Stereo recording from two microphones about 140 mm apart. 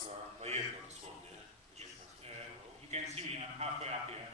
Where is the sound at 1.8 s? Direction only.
50° right (ahead or behind).